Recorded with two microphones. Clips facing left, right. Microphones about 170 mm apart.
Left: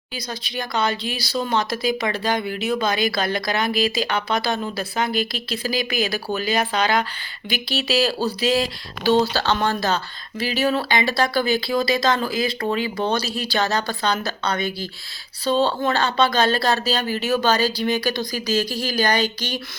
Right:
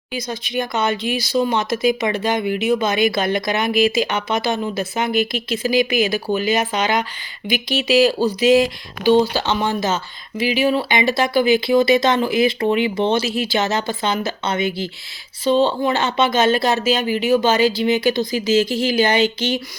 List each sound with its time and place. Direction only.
0.1 s speech: 20° right (ahead or behind)